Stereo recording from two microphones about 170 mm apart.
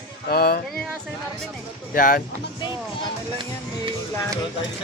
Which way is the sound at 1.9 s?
55° left (ahead or behind).